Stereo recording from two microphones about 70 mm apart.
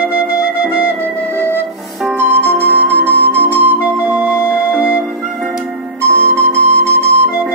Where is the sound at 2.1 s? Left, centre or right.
Right.